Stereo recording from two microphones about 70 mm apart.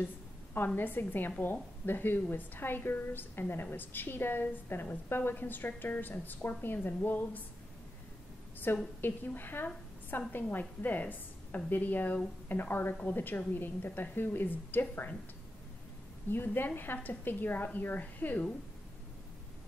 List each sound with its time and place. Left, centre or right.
0.7 s a woman's voice: left
8.7 s a woman's voice: left
16.3 s a woman's voice: left